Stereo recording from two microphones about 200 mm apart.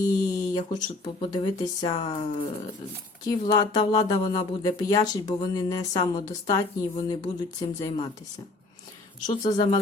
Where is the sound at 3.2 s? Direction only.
20° left (ahead or behind).